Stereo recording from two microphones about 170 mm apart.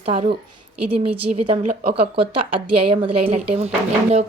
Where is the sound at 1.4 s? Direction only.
40° right (ahead or behind).